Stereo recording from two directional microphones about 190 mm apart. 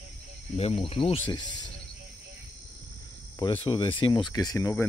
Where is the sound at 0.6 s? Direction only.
30° left (ahead or behind).